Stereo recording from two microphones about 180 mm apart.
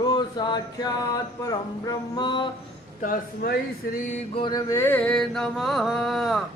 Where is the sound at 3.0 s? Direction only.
55° left (ahead or behind).